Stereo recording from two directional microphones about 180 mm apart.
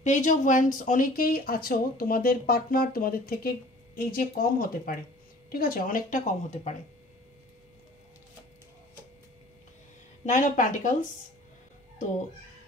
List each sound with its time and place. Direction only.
0.0 s speech: 45° left (ahead or behind)
10.2 s speech: 45° left (ahead or behind)